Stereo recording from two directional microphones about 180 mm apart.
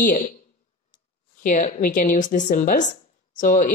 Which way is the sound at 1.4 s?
45° left (ahead or behind).